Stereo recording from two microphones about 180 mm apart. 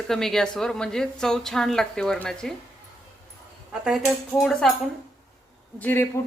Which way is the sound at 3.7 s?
Centre (ahead or behind).